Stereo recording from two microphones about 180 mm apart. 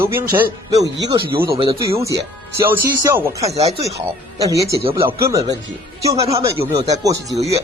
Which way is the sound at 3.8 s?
20° right (ahead or behind).